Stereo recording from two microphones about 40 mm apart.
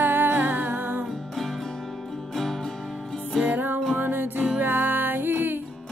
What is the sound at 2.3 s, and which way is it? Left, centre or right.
Music, centre.